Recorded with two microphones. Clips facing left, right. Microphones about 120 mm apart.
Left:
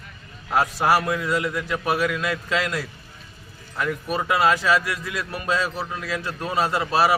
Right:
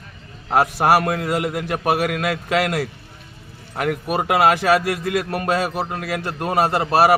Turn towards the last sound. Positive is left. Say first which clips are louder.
# right 5 dB
turn(degrees=-60)  # may be behind; listen again after turning